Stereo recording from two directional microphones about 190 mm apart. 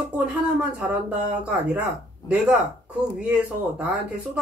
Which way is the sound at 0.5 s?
5° right (ahead or behind).